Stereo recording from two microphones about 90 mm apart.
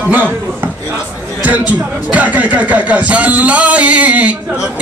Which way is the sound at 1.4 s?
20° right (ahead or behind).